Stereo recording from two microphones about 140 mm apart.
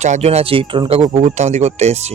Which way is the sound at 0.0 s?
55° right (ahead or behind).